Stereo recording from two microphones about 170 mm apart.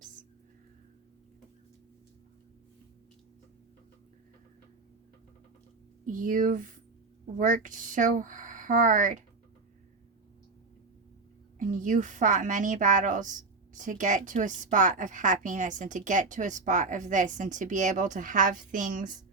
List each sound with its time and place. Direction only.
6.1 s a woman's voice: 50° right (ahead or behind)
11.6 s a woman's voice: 50° right (ahead or behind)